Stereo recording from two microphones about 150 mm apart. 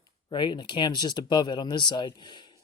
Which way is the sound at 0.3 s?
30° left (ahead or behind).